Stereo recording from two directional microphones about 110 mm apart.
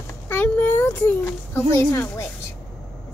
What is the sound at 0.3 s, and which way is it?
A child's voice, 20° left (ahead or behind).